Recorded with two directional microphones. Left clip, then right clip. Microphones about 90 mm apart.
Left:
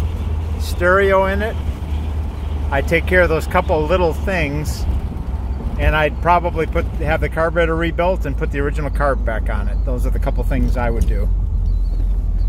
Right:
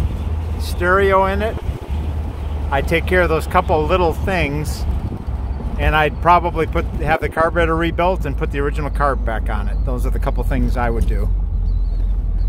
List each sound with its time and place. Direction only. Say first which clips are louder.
0.7 s speech: left 1 dB; 5° right (ahead or behind)
2.7 s speech: left 1 dB; 10° right (ahead or behind)
4.4 s speech: right 1 dB; 30° right (ahead or behind)
5.8 s speech: right 1 dB; 35° right (ahead or behind)